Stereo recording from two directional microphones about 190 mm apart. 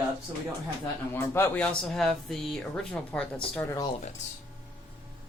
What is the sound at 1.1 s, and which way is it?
Speech, 15° left (ahead or behind).